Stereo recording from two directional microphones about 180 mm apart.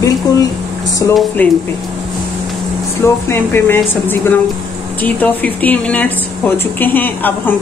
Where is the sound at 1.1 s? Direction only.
10° left (ahead or behind).